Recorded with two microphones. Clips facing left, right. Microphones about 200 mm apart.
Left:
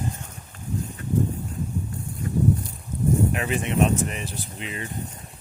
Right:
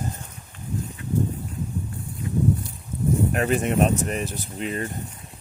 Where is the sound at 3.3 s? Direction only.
40° right (ahead or behind).